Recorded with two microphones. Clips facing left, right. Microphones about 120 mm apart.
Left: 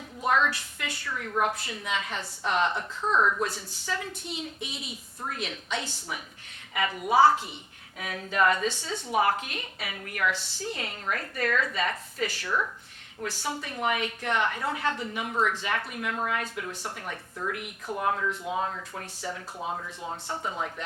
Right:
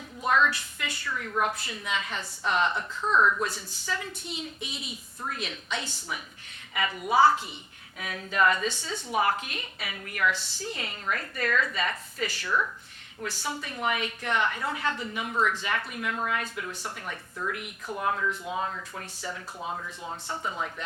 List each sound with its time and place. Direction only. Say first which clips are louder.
0.3 s a woman's voice: right 1 dB; 45° left (ahead or behind)
3.0 s speech: right 1 dB; 30° left (ahead or behind)
3.5 s a woman's voice: even; 65° left (ahead or behind)
3.9 s a woman's voice: left 1 dB; 55° left (ahead or behind)
6.7 s a woman's voice: left 1 dB; 45° left (ahead or behind)
15.4 s speech: even; 35° left (ahead or behind)
15.6 s a woman's voice: even; 45° left (ahead or behind)
17.1 s speech: even; 35° left (ahead or behind)